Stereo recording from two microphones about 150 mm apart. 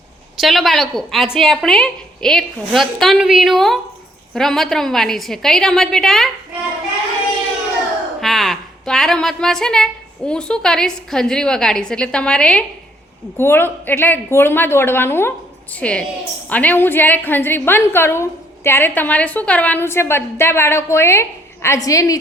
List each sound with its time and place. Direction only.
0.3 s speech: centre (ahead or behind)
8.2 s a woman's voice: centre (ahead or behind); by 22.2 s 25° left (ahead or behind)